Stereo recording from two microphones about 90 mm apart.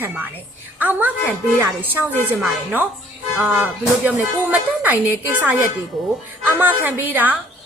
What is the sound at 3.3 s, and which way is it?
A woman's voice, 20° right (ahead or behind).